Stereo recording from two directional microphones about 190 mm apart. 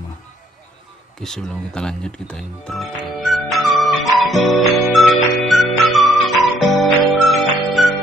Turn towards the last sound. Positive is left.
turn(degrees=0)  # may be behind; listen again after turning